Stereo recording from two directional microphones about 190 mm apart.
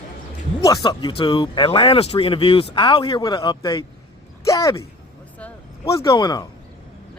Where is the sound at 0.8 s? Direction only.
25° left (ahead or behind).